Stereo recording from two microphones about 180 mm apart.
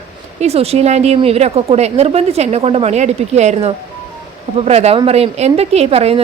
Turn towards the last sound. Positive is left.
turn(degrees=-35)  # may be behind; listen again after turning